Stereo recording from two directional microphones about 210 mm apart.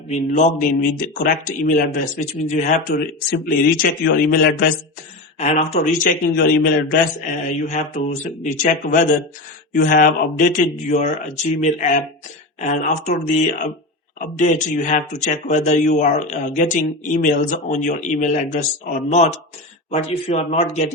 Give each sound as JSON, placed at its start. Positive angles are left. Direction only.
{"t": 0.1, "sound": "a man's voice", "side_deg": 35}
{"t": 5.4, "sound": "a man's voice", "side_deg": 35}